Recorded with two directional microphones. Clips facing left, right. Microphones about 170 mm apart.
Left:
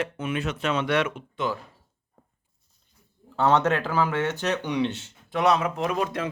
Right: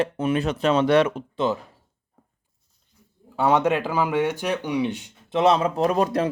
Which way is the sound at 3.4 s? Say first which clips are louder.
Right 2 dB; 10° right (ahead or behind).